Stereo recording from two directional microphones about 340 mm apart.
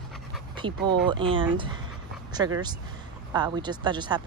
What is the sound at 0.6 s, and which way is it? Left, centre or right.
A woman's voice, centre.